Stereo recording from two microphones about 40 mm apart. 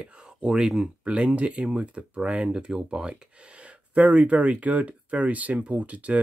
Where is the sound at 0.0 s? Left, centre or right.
Right.